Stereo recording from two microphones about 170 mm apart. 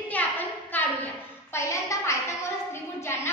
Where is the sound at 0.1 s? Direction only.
10° left (ahead or behind).